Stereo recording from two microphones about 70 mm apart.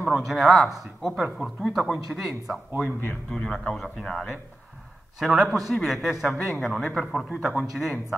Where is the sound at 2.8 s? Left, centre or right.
Left.